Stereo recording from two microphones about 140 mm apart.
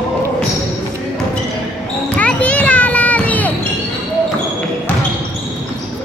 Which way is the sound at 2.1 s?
10° left (ahead or behind).